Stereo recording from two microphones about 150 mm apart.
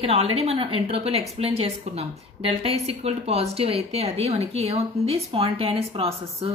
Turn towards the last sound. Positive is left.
turn(degrees=-40)  # may be behind; listen again after turning